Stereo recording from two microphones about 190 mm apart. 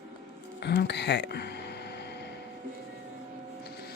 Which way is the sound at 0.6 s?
60° left (ahead or behind).